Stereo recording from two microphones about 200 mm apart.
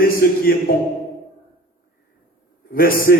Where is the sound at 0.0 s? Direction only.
45° left (ahead or behind).